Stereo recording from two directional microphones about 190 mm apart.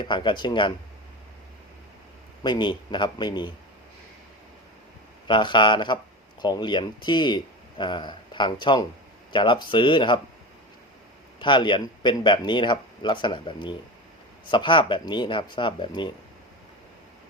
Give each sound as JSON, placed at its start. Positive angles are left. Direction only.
{"t": 0.0, "sound": "speech", "side_deg": 25}
{"t": 2.4, "sound": "speech", "side_deg": 25}
{"t": 5.3, "sound": "speech", "side_deg": 25}
{"t": 11.3, "sound": "speech", "side_deg": 25}